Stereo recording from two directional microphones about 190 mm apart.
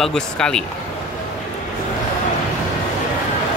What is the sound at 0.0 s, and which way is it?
Speech, 5° left (ahead or behind).